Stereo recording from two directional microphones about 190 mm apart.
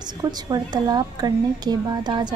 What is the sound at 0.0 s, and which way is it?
A woman's voice, 20° right (ahead or behind).